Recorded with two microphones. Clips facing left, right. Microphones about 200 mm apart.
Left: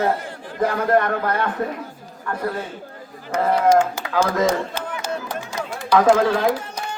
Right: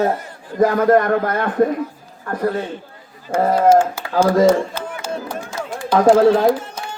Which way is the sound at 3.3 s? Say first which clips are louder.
Right 3 dB; 35° right (ahead or behind).